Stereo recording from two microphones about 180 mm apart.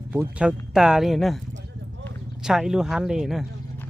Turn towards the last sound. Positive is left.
turn(degrees=0)  # may be behind; listen again after turning